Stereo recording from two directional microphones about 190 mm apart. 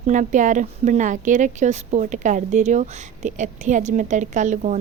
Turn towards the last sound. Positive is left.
turn(degrees=-40)  # may be behind; listen again after turning